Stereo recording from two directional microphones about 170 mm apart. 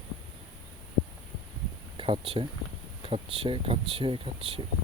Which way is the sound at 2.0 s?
30° right (ahead or behind).